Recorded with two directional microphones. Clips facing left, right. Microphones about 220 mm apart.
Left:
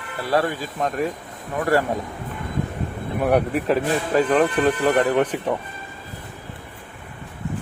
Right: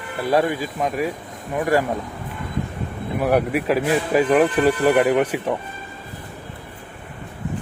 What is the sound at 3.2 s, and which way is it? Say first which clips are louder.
Speech: even; 5° right (ahead or behind).